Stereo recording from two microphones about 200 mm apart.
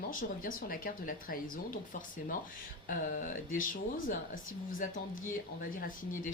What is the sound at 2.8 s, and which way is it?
Speech, 40° left (ahead or behind).